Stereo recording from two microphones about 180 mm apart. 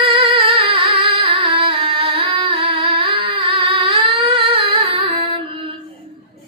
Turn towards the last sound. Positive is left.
turn(degrees=-30)  # may be behind; listen again after turning